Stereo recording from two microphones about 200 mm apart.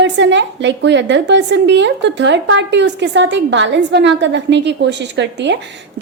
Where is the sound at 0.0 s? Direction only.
60° right (ahead or behind).